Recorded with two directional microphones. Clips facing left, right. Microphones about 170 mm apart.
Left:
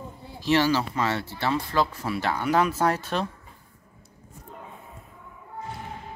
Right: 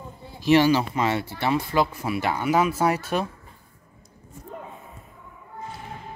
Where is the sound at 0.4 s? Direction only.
15° right (ahead or behind).